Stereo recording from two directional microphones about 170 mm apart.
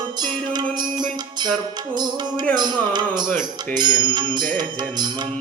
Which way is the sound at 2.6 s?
25° right (ahead or behind).